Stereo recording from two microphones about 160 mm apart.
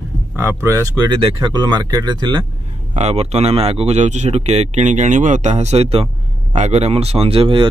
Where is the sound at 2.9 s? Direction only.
40° right (ahead or behind).